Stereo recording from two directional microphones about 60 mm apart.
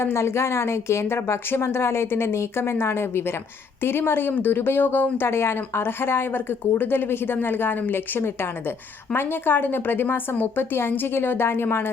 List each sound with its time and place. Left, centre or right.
0.0 s speech: left